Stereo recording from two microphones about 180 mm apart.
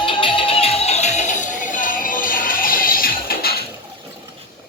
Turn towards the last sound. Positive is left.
turn(degrees=55)  # may be behind; listen again after turning